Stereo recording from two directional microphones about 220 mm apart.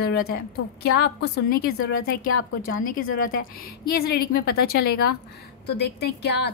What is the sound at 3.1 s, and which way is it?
A woman's voice, 40° left (ahead or behind).